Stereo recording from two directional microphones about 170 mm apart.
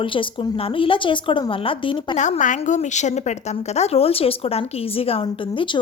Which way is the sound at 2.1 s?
45° left (ahead or behind).